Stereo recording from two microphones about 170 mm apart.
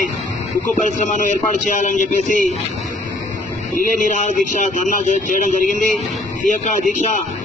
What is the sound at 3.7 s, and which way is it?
Speech, 45° left (ahead or behind).